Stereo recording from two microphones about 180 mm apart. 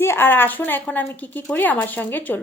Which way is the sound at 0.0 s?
15° left (ahead or behind).